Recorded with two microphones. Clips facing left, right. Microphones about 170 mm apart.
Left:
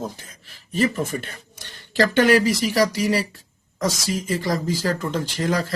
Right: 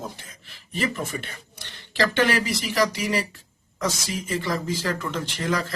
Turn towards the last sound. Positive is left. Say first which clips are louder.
# left 3 dB
turn(degrees=35)  # may be behind; listen again after turning